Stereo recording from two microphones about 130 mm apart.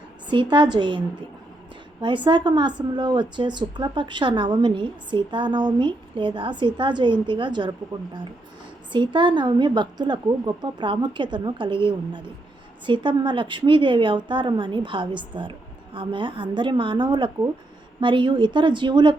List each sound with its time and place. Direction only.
0.5 s a woman's voice: 35° right (ahead or behind)
8.9 s a woman's voice: 40° right (ahead or behind)